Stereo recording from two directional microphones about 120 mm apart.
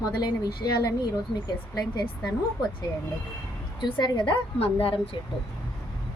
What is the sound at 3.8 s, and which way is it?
Speech, 40° left (ahead or behind).